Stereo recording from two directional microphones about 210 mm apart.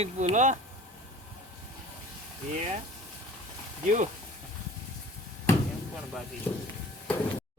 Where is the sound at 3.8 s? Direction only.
35° right (ahead or behind).